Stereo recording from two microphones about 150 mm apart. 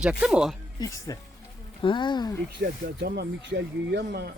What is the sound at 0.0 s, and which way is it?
Speech, 5° right (ahead or behind).